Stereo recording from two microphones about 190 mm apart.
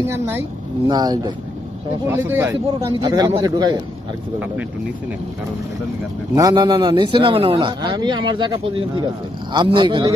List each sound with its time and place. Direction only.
0.8 s a man's voice: 20° right (ahead or behind)
6.3 s a man's voice: 20° right (ahead or behind)